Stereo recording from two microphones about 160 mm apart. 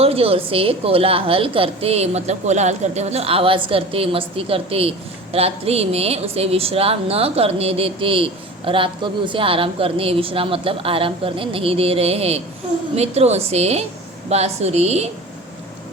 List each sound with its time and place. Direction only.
0.0 s a woman's voice: 40° right (ahead or behind)